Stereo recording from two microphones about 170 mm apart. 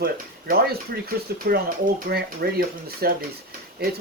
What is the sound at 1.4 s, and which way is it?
Speech, 75° right (ahead or behind).